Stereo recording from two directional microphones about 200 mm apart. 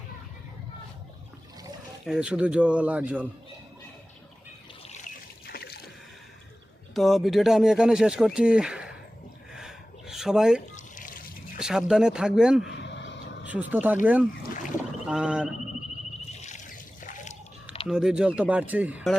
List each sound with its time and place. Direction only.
2.0 s speech: 5° right (ahead or behind)
4.9 s trickle: 45° left (ahead or behind)
6.9 s speech: centre (ahead or behind)
9.5 s gasp: 5° right (ahead or behind)
10.8 s a sound: 40° left (ahead or behind)
11.6 s speech: 5° right (ahead or behind)
12.8 s vehicle: 60° left (ahead or behind)
13.4 s speech: 10° right (ahead or behind)
16.4 s trickle: 40° left (ahead or behind)
17.8 s speech: 5° right (ahead or behind)